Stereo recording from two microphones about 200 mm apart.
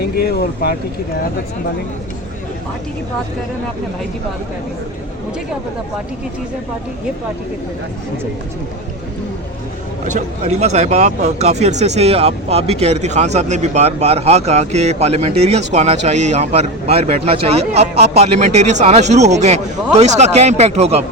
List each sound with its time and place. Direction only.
0.0 s speech: 50° left (ahead or behind)
10.1 s speech: 35° right (ahead or behind)